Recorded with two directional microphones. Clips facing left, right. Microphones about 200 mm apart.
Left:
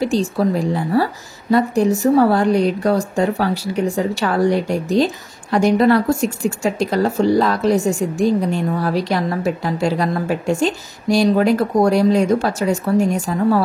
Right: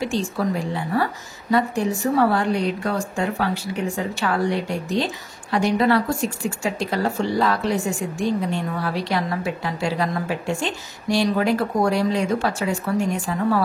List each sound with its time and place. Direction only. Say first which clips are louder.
0.0 s a woman's voice: left 6 dB; 35° left (ahead or behind)